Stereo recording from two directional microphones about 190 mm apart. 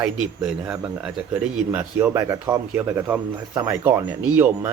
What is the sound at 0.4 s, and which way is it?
A man's voice, 5° right (ahead or behind).